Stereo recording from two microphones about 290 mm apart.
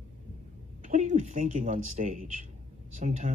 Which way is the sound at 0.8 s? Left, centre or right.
Right.